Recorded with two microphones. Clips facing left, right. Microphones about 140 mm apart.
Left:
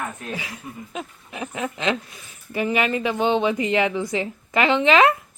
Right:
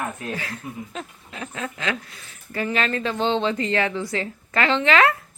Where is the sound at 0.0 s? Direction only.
Centre (ahead or behind).